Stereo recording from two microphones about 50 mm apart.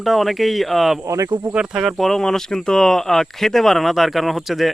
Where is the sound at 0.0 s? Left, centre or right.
Centre.